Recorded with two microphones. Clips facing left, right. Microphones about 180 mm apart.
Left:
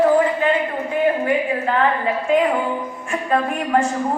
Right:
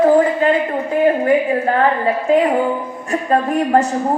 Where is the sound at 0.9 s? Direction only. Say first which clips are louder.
Right 5 dB; 40° right (ahead or behind).